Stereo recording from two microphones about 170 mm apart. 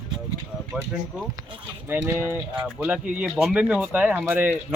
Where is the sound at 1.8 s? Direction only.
15° right (ahead or behind).